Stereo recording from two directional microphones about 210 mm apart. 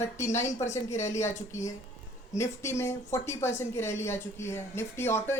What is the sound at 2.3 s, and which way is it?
A woman's voice, 15° left (ahead or behind).